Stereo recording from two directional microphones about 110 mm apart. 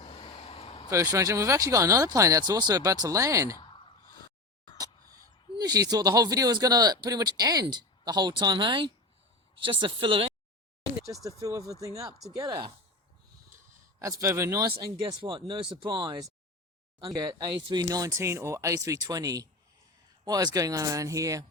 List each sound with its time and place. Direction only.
0.0 s vehicle: 55° left (ahead or behind)
0.9 s speech: 25° right (ahead or behind)
3.6 s a sound: 45° left (ahead or behind)
5.5 s speech: 35° right (ahead or behind); by 10.3 s 55° right (ahead or behind)
11.1 s speech: 30° right (ahead or behind)
14.0 s speech: 30° right (ahead or behind)
15.2 s speech: 45° right (ahead or behind)
17.8 s speech: 30° right (ahead or behind)